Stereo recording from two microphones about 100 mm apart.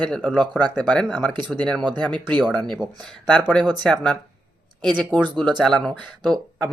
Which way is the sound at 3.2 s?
10° left (ahead or behind).